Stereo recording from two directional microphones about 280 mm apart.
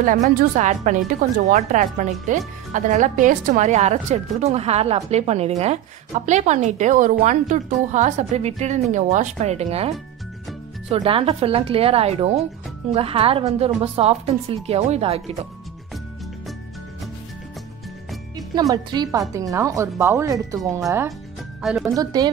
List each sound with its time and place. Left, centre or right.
0.0 s a woman's voice: right
18.3 s speech: centre